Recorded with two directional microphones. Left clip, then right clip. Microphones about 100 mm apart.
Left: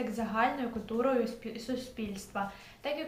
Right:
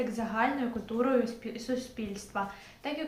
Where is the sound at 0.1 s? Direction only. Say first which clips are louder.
Even; 30° left (ahead or behind).